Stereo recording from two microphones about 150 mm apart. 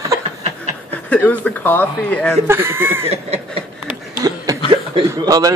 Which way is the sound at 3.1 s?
40° right (ahead or behind).